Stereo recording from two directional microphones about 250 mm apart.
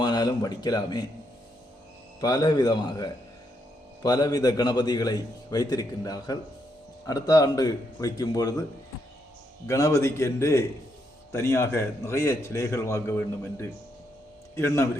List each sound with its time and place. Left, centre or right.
0.0 s speech: centre
2.2 s a man's voice: centre
9.6 s a man's voice: centre